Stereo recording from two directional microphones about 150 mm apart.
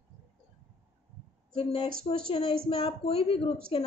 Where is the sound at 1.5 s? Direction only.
35° left (ahead or behind).